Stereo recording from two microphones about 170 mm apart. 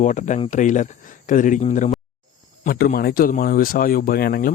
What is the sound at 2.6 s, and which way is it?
Speech, 60° left (ahead or behind).